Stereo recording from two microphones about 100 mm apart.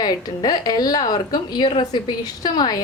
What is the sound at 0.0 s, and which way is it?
A woman's voice, 40° left (ahead or behind).